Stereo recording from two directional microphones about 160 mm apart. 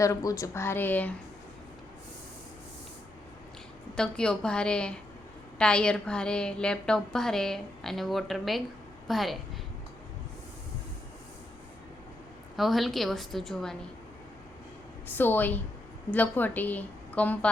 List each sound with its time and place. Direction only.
0.0 s a woman's voice: 20° left (ahead or behind)
3.9 s a woman's voice: 5° left (ahead or behind)
12.5 s a woman's voice: centre (ahead or behind)
15.0 s a woman's voice: 10° left (ahead or behind)